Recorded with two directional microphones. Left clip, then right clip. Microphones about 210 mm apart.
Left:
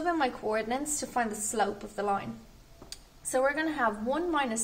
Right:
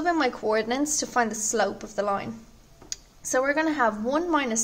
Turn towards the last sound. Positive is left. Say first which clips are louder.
# right 5 dB
turn(degrees=-50)  # may be behind; listen again after turning